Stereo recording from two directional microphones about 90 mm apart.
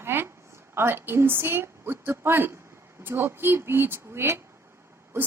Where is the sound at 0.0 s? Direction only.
25° right (ahead or behind).